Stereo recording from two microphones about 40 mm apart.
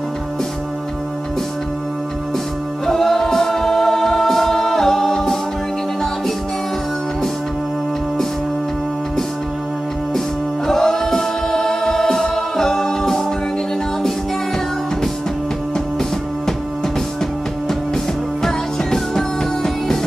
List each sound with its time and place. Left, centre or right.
2.9 s a capella: centre
10.7 s choir: centre
18.4 s music: centre